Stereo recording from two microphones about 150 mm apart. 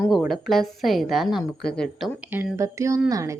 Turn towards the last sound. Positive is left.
turn(degrees=-20)  # may be behind; listen again after turning